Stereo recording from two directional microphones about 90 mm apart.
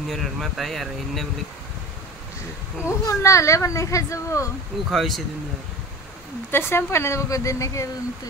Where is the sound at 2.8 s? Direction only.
35° left (ahead or behind).